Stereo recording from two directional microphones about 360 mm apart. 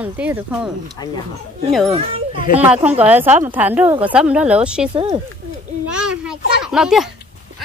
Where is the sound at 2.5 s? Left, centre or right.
Centre.